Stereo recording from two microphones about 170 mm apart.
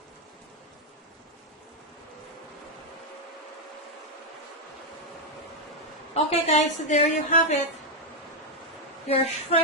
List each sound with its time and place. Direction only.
6.1 s a woman's voice: 40° left (ahead or behind)
9.0 s a woman's voice: 35° left (ahead or behind)